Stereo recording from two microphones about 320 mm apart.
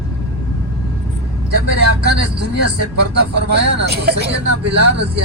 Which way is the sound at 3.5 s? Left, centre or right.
Right.